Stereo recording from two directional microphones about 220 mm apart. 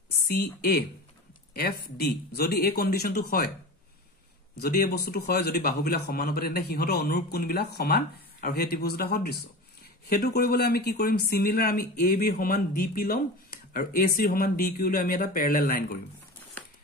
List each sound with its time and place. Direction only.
0.3 s a man's voice: 45° left (ahead or behind)
4.6 s a man's voice: 45° left (ahead or behind)